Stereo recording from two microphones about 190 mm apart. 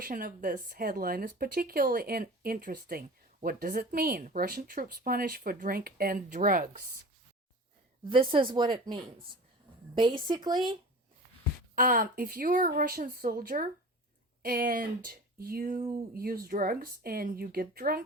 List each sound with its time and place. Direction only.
0.0 s speech: 50° right (ahead or behind)
8.0 s speech: 25° right (ahead or behind)
11.7 s speech: 45° right (ahead or behind)